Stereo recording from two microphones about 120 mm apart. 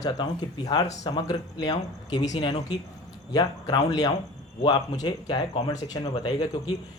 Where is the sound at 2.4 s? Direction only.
55° left (ahead or behind).